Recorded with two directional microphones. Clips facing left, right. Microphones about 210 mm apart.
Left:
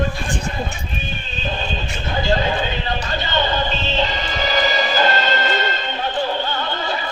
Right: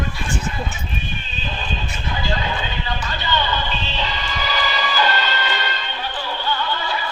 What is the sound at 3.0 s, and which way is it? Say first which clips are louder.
Music: left 1 dB; 45° left (ahead or behind).